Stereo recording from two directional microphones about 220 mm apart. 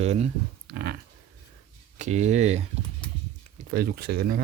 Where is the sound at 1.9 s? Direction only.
30° right (ahead or behind).